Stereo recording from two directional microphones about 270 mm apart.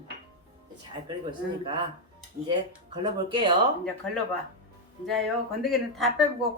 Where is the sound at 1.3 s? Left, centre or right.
Centre.